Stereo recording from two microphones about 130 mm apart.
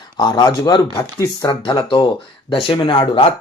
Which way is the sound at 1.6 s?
40° left (ahead or behind).